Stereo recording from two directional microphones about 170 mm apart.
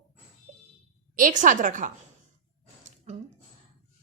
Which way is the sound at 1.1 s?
50° right (ahead or behind).